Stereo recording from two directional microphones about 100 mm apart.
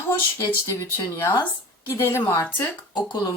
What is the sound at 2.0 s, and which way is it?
Speech, 25° left (ahead or behind).